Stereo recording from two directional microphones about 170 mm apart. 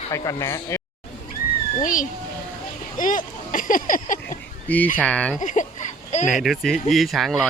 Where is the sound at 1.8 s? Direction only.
50° left (ahead or behind).